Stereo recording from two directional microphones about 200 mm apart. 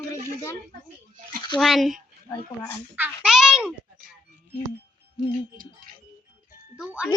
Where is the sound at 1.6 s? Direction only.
Centre (ahead or behind).